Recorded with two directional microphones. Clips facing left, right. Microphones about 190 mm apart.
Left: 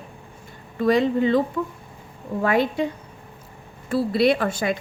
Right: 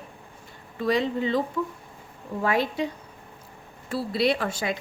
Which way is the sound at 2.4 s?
55° left (ahead or behind).